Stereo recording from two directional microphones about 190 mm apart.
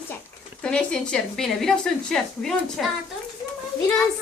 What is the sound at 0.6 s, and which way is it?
A woman's voice, 5° left (ahead or behind).